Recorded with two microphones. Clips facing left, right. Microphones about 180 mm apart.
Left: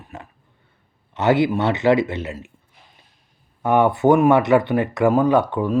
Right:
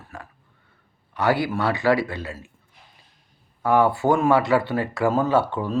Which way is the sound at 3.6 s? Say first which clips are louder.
Left 3 dB; 20° left (ahead or behind).